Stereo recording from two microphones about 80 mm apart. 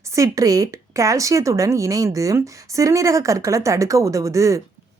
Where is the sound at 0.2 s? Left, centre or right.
Right.